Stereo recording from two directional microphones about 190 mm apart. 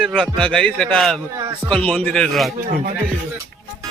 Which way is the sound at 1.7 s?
5° left (ahead or behind).